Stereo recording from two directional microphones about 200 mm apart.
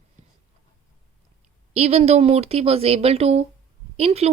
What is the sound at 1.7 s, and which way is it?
Speech, 30° right (ahead or behind).